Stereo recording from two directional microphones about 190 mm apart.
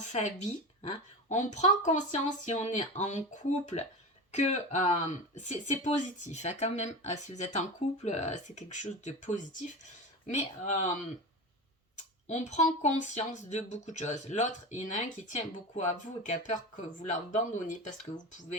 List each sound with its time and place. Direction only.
0.0 s speech: 35° left (ahead or behind)